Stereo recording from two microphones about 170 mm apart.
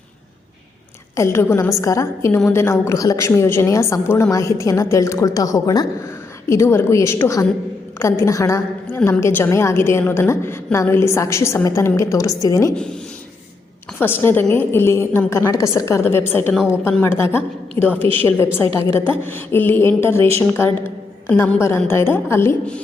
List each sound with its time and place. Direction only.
1.1 s a woman's voice: 15° left (ahead or behind)
14.0 s a woman's voice: 15° left (ahead or behind)
21.2 s a woman's voice: 10° left (ahead or behind)